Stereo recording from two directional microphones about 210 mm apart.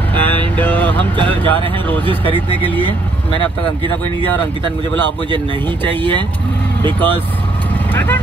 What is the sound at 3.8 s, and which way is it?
Speech, 25° right (ahead or behind).